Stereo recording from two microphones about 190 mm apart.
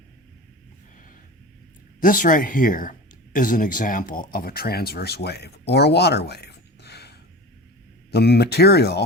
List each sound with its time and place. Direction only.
2.0 s speech: 45° left (ahead or behind)